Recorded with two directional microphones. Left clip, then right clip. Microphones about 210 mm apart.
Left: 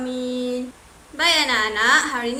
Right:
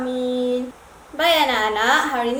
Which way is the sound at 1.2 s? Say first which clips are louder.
Right 1 dB; 15° left (ahead or behind).